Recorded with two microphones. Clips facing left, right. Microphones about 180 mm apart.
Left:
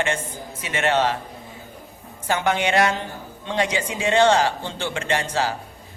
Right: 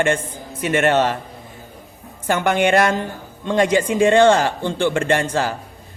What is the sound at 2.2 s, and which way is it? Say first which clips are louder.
Speech: right 4 dB; 50° right (ahead or behind).